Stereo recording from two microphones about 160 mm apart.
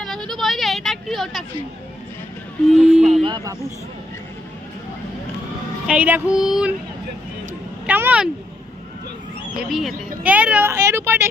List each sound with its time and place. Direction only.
0.0 s a sound: centre (ahead or behind)
2.6 s speech: centre (ahead or behind)
3.2 s speech: 25° right (ahead or behind)
5.9 s speech: 10° right (ahead or behind)
7.9 s speech: 10° right (ahead or behind)
9.6 s speech: centre (ahead or behind)